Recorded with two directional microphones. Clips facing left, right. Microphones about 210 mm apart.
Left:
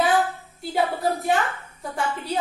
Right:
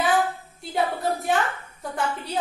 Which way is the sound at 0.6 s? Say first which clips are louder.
Left 2 dB; centre (ahead or behind).